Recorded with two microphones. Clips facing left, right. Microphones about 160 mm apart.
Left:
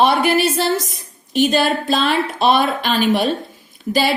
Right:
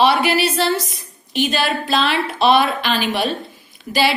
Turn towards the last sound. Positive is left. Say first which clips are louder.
# left 1 dB
turn(degrees=45)  # may be behind; listen again after turning